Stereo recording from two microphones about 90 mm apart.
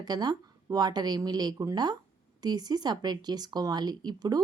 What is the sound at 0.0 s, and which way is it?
Speech, 50° right (ahead or behind).